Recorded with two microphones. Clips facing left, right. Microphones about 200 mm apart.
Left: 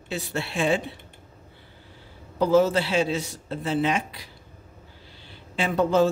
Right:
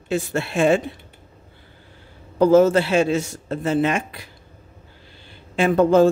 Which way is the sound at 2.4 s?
50° right (ahead or behind).